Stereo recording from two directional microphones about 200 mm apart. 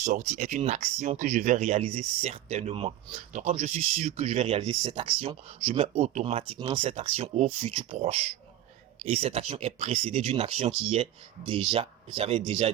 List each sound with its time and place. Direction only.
0.0 s speech: 40° right (ahead or behind)